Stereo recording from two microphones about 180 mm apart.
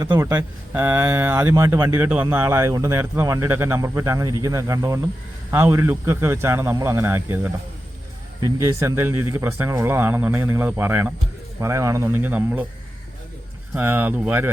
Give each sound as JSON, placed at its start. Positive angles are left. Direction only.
{"t": 0.0, "sound": "speech", "side_deg": -15}
{"t": 13.7, "sound": "speech", "side_deg": -10}